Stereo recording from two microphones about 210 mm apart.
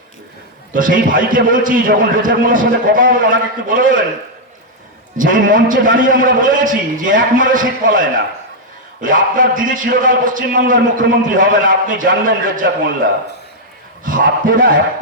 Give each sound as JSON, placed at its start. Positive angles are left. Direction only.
{"t": 0.7, "sound": "a man's voice", "side_deg": -40}
{"t": 5.1, "sound": "a man's voice", "side_deg": -40}
{"t": 14.0, "sound": "a man's voice", "side_deg": -40}